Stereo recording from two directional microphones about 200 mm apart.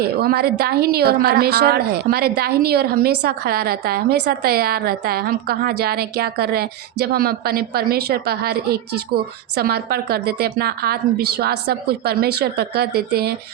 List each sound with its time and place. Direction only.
0.0 s a woman's voice: 50° right (ahead or behind)